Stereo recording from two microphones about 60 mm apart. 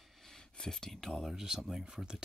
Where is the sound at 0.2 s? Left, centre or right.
Centre.